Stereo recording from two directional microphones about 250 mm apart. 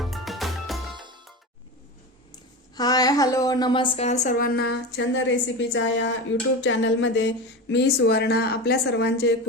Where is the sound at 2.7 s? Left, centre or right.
Centre.